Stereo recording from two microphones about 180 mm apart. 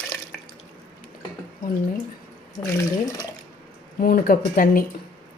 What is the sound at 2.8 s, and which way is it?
Speech, 20° left (ahead or behind).